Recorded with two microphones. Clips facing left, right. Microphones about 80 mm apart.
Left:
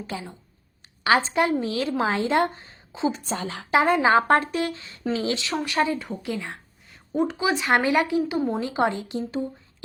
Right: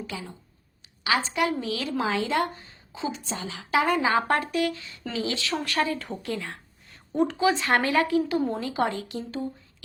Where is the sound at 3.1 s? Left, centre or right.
Left.